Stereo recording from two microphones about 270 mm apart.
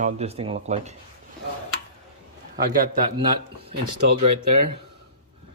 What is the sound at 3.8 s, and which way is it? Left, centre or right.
Speech, right.